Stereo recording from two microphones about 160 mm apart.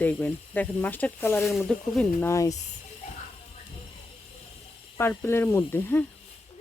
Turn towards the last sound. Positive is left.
turn(degrees=15)  # may be behind; listen again after turning